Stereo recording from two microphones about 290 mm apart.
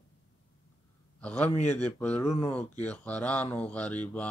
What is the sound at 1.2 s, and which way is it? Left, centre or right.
Speech, centre.